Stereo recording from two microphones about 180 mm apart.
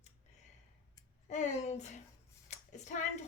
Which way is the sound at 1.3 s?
40° left (ahead or behind).